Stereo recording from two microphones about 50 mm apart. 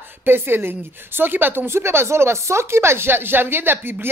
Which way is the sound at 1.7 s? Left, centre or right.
Right.